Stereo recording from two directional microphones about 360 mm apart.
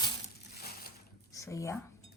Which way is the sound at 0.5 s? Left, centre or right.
Left.